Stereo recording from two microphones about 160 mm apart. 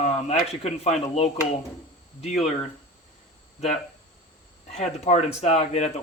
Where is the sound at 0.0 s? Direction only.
40° left (ahead or behind).